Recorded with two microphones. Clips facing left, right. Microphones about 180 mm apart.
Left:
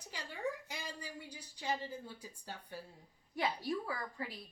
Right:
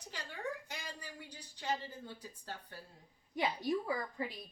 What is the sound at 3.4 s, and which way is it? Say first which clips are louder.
Speech: right 2 dB; 20° right (ahead or behind).